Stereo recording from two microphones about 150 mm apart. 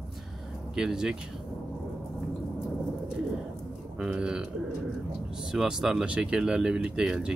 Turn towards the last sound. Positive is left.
turn(degrees=-5)  # may be behind; listen again after turning